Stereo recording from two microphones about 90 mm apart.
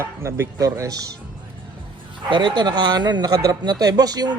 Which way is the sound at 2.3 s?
60° right (ahead or behind).